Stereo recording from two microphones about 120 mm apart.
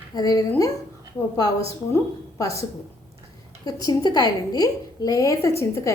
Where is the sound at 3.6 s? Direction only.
35° left (ahead or behind).